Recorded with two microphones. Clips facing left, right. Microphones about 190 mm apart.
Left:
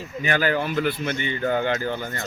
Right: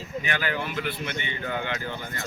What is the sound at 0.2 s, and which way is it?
A man's voice, 40° left (ahead or behind).